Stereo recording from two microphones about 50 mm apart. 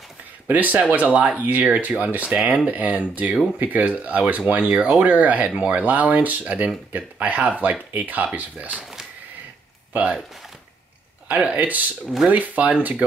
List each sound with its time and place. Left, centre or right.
0.5 s speech: right
4.7 s speech: centre
5.0 s speech: right
11.2 s speech: right
11.5 s speech: right